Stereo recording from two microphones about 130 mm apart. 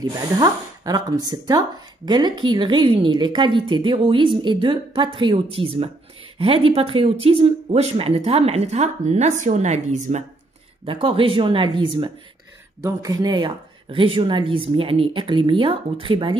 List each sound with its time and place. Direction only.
0.0 s a woman's voice: 30° right (ahead or behind); by 10.2 s 65° right (ahead or behind)
10.9 s a woman's voice: 45° right (ahead or behind)
12.8 s a woman's voice: 30° right (ahead or behind)